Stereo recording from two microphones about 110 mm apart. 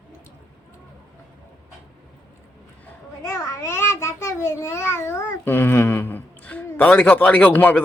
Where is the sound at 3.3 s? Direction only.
25° left (ahead or behind).